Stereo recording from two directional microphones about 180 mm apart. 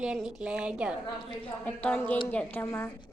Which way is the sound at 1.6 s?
5° left (ahead or behind).